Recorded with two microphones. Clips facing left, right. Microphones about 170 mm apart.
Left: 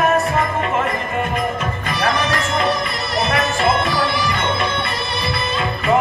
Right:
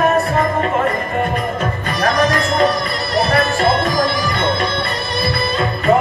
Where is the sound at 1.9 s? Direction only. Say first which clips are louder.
Right 4 dB; 35° right (ahead or behind).